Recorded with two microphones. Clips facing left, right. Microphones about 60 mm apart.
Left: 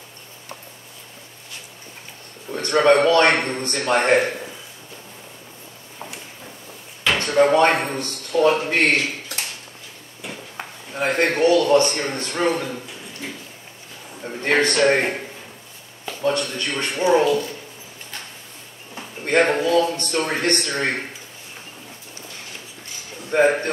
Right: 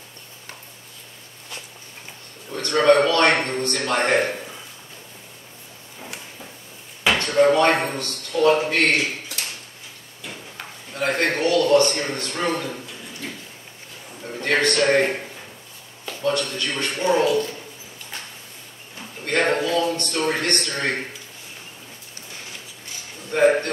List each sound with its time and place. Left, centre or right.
2.5 s a man's voice: centre
7.4 s a man's voice: centre
11.0 s a man's voice: centre
14.2 s a man's voice: centre
16.1 s a man's voice: centre
19.2 s a man's voice: centre
23.3 s a man's voice: centre